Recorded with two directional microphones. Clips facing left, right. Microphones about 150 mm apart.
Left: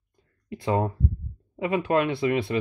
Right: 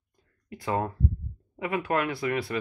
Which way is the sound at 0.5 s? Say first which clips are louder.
Left 4 dB; 25° left (ahead or behind).